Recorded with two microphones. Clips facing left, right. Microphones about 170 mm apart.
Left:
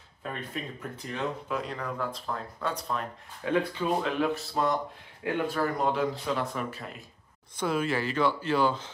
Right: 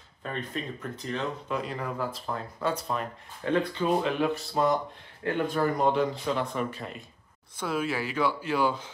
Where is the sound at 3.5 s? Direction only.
10° left (ahead or behind).